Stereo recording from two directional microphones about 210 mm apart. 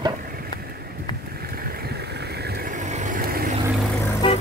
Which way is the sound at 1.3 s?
45° right (ahead or behind).